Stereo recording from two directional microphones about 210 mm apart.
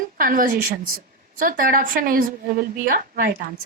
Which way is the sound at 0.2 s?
40° right (ahead or behind).